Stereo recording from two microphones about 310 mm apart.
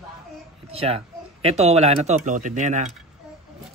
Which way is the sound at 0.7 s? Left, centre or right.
Centre.